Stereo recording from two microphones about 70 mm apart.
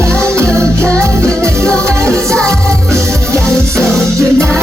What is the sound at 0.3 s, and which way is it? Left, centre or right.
Music, right.